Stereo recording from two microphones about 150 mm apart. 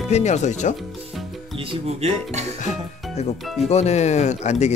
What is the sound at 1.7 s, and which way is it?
Speech, 45° right (ahead or behind).